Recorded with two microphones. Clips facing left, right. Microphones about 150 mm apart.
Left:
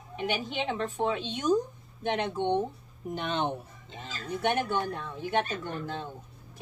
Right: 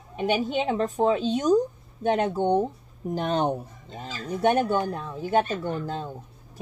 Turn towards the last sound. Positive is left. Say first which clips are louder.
# right 6 dB
turn(degrees=-40)  # may be behind; listen again after turning